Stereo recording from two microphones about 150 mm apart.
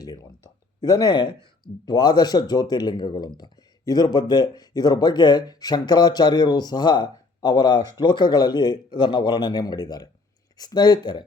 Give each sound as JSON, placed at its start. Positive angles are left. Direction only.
{"t": 0.8, "sound": "speech", "side_deg": 25}